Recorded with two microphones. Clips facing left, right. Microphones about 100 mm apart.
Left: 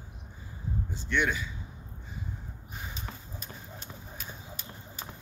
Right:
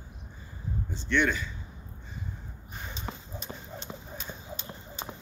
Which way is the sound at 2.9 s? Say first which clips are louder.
Right 3 dB; 30° right (ahead or behind).